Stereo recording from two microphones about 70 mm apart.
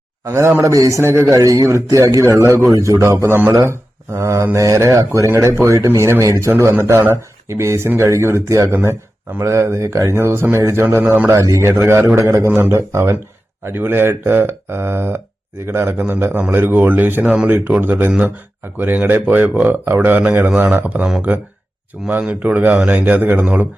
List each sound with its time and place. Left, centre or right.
0.3 s a man's voice: right
6.5 s speech: right
11.3 s a man's voice: right
11.7 s speech: right
12.1 s a man's voice: right
16.0 s speech: right
22.0 s speech: centre
22.3 s speech: right